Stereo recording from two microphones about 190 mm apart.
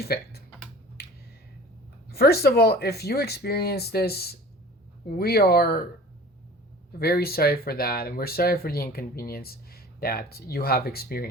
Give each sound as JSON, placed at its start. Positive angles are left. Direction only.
{"t": 0.0, "sound": "speech", "side_deg": 55}
{"t": 2.0, "sound": "speech", "side_deg": 55}
{"t": 7.0, "sound": "speech", "side_deg": 55}